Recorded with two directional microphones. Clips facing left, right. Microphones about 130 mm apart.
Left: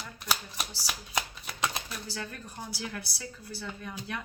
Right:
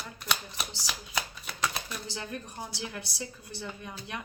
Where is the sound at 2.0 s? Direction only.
25° right (ahead or behind).